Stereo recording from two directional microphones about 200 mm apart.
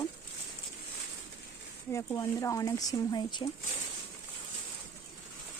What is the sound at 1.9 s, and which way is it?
Speech, 15° left (ahead or behind).